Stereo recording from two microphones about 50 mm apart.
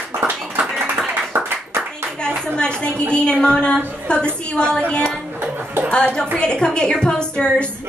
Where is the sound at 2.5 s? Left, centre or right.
Centre.